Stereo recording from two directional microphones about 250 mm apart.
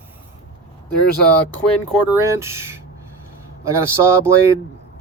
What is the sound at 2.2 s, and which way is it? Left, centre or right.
Speech, centre.